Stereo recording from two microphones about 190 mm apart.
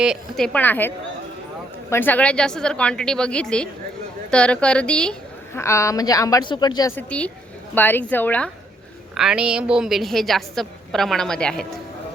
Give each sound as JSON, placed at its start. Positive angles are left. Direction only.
{"t": 0.0, "sound": "a woman's voice", "side_deg": 0}
{"t": 5.5, "sound": "a woman's voice", "side_deg": 15}
{"t": 9.1, "sound": "a woman's voice", "side_deg": -5}